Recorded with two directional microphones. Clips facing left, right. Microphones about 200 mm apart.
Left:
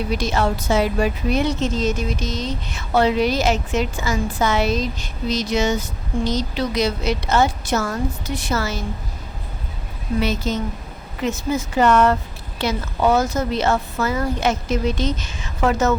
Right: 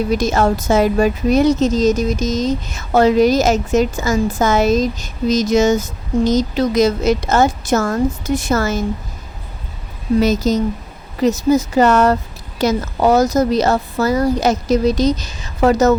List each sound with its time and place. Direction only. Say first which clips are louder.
0.1 s a woman's voice: right 4 dB; 45° right (ahead or behind)
10.2 s a woman's voice: right 7 dB; 40° right (ahead or behind)